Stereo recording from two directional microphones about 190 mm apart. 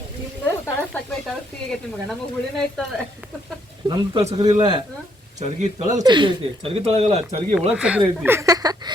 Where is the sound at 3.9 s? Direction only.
25° right (ahead or behind).